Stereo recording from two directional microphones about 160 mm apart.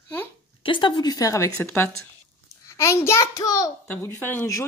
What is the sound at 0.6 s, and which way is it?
A woman's voice, 30° left (ahead or behind).